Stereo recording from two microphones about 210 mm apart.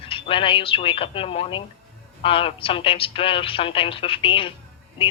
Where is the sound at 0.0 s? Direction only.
25° left (ahead or behind).